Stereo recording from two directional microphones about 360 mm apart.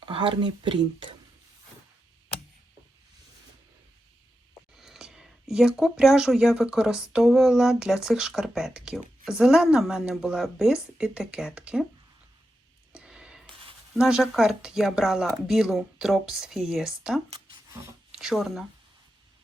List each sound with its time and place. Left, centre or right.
0.0 s speech: centre
4.8 s speech: centre
12.9 s a sound: centre
13.9 s speech: centre
17.2 s a sound: centre
18.1 s speech: centre